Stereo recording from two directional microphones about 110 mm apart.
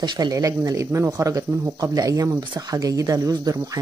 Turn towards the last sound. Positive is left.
turn(degrees=-35)  # may be behind; listen again after turning